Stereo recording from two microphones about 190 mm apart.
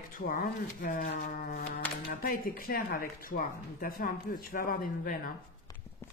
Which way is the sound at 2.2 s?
50° left (ahead or behind).